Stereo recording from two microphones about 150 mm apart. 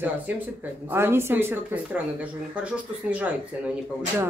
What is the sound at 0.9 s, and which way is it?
Speech, 15° right (ahead or behind).